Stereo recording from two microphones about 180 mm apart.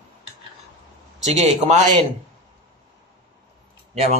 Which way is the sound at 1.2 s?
40° right (ahead or behind).